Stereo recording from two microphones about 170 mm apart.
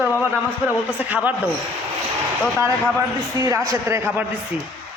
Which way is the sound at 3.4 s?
20° right (ahead or behind).